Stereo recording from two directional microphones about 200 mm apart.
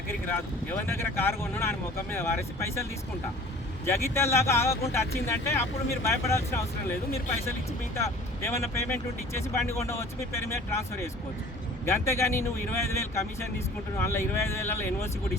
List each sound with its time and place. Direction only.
0.3 s speech: 10° left (ahead or behind)
3.8 s speech: 15° left (ahead or behind)
7.9 s speech: 15° left (ahead or behind)